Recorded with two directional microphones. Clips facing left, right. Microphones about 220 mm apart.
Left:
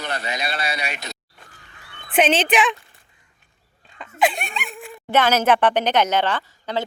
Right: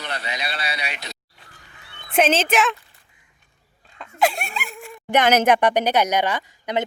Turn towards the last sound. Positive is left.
turn(degrees=-15)  # may be behind; listen again after turning